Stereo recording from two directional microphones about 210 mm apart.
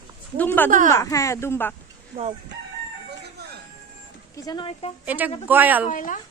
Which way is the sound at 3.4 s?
50° right (ahead or behind).